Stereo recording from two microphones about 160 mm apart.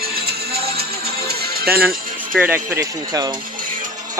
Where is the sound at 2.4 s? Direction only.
15° right (ahead or behind).